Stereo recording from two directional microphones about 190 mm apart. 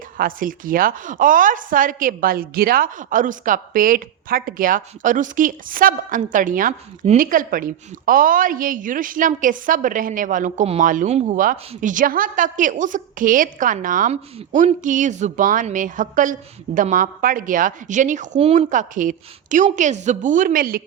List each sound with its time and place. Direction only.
0.2 s a woman's voice: 45° right (ahead or behind)